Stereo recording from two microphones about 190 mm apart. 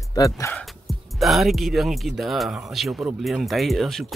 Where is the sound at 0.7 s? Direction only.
Centre (ahead or behind).